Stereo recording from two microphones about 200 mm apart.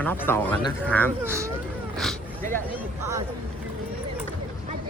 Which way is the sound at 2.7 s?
15° right (ahead or behind).